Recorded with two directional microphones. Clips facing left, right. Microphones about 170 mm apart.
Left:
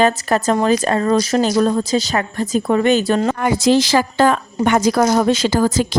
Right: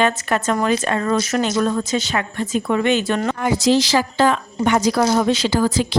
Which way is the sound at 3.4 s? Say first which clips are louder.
Left 2 dB; 55° left (ahead or behind).